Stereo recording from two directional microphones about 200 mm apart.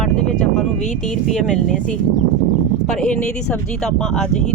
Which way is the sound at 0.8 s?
35° left (ahead or behind).